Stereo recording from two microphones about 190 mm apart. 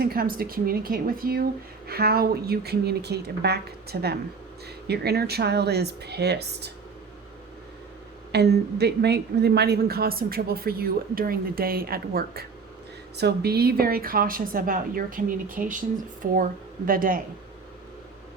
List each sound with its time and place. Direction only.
0.0 s speech: 50° right (ahead or behind)
8.3 s speech: 60° right (ahead or behind)